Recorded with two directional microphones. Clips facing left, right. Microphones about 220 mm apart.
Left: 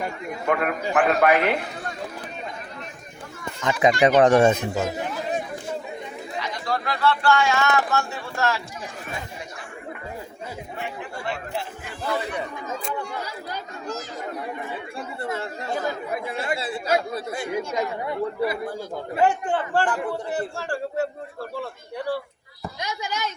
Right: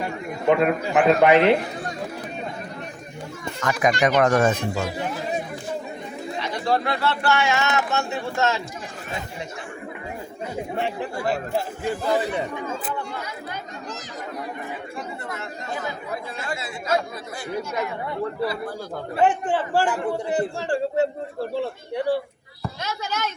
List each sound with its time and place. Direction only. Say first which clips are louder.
0.4 s speech: right 5 dB; 25° right (ahead or behind)
3.6 s speech: left 2 dB; 25° left (ahead or behind)
6.4 s speech: right 5 dB; 25° right (ahead or behind)
10.8 s speech: right 7 dB; 30° right (ahead or behind)
14.9 s speech: left 3 dB; 30° left (ahead or behind)
19.5 s a man's voice: right 1 dB; 5° right (ahead or behind)
22.8 s speech: even; 15° left (ahead or behind)